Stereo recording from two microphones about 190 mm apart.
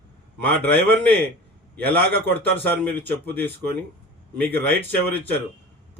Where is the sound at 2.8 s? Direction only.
10° left (ahead or behind).